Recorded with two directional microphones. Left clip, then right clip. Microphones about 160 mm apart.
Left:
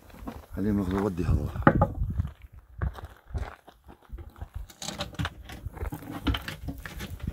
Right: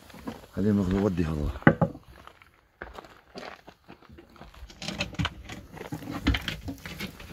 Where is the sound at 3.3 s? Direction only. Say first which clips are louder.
Right 2 dB; 20° right (ahead or behind).